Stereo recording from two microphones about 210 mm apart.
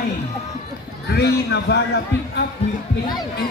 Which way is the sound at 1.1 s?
50° left (ahead or behind).